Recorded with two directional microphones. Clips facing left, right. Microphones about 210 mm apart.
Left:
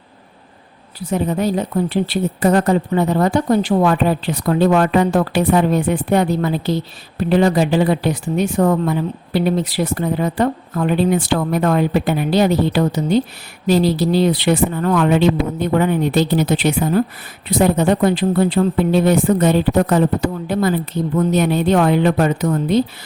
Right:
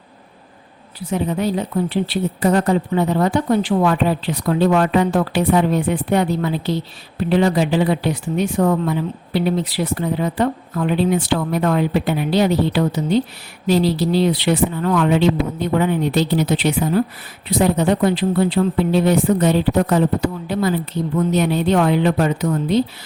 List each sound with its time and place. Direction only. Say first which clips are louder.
1.1 s speech: left 2 dB; 45° left (ahead or behind)